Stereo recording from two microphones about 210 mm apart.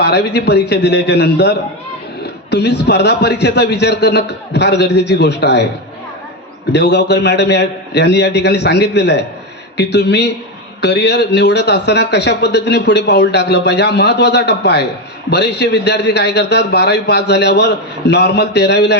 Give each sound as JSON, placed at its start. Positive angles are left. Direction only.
{"t": 0.0, "sound": "a man's voice", "side_deg": 50}
{"t": 6.7, "sound": "a man's voice", "side_deg": 55}